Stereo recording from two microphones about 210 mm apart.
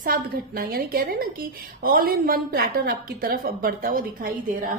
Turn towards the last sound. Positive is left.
turn(degrees=-40)  # may be behind; listen again after turning